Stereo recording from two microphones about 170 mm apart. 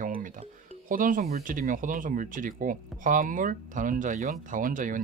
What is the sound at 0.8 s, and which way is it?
Speech, 55° right (ahead or behind).